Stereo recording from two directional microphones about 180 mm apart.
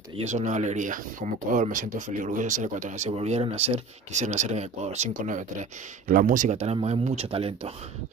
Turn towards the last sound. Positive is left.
turn(degrees=-35)  # may be behind; listen again after turning